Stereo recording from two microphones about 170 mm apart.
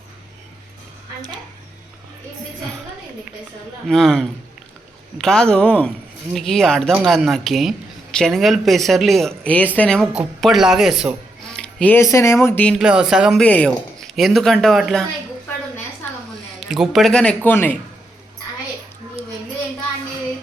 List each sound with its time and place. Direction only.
3.8 s speech: 5° left (ahead or behind)
11.5 s speech: 10° left (ahead or behind)
12.7 s speech: 5° right (ahead or behind)
13.4 s speech: 10° left (ahead or behind)
16.6 s speech: 5° right (ahead or behind)